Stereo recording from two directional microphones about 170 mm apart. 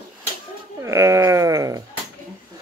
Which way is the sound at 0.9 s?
15° right (ahead or behind).